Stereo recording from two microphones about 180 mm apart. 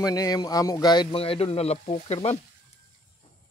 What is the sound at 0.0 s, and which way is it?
Speech, 20° left (ahead or behind).